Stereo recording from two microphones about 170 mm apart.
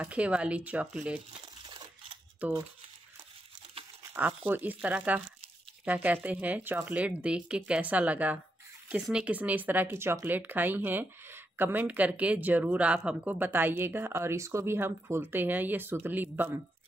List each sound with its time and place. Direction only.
0.0 s speech: 5° right (ahead or behind)
1.7 s a sound: 30° right (ahead or behind)
4.1 s speech: 10° right (ahead or behind)
6.2 s speech: 10° right (ahead or behind)